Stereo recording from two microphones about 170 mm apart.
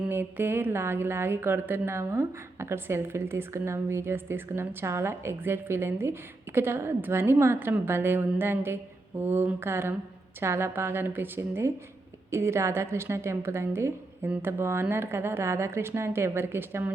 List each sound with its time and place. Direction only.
0.1 s a woman's voice: 15° right (ahead or behind)